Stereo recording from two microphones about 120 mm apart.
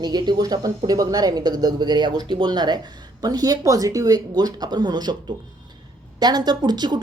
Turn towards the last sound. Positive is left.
turn(degrees=-35)  # may be behind; listen again after turning